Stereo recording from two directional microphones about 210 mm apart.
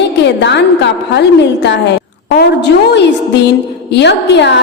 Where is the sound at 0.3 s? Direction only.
55° left (ahead or behind).